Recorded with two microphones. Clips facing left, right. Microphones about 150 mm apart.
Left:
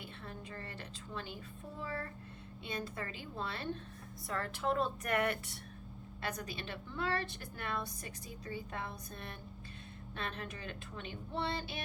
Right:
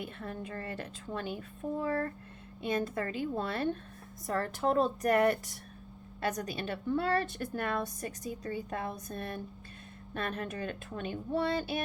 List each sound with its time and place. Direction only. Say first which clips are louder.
0.0 s a woman's voice: right 8 dB; 50° right (ahead or behind)